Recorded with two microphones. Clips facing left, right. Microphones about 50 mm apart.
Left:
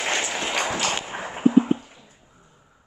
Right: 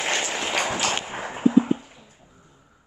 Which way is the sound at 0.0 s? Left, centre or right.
Centre.